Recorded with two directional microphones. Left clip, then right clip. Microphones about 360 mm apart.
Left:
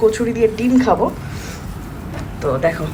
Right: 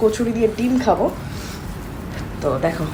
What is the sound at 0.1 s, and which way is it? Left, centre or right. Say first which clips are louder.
Speech: left 3 dB; centre.